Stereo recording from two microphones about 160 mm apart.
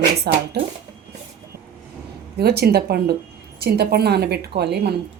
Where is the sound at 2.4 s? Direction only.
85° right.